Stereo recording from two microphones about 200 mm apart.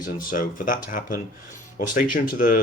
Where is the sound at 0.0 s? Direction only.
45° left (ahead or behind).